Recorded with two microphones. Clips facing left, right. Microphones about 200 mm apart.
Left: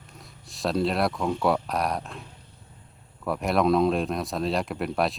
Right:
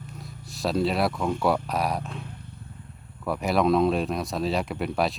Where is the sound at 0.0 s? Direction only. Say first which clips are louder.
Right 7 dB; centre (ahead or behind).